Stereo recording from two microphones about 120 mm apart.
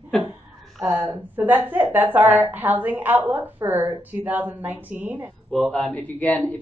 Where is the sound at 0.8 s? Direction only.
20° right (ahead or behind).